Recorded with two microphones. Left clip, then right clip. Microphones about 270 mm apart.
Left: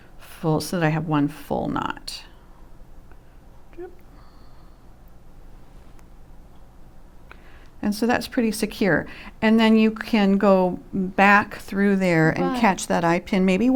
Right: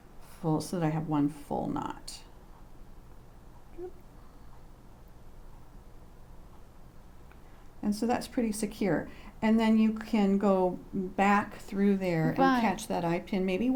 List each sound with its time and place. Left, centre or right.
0.2 s speech: left
7.8 s speech: left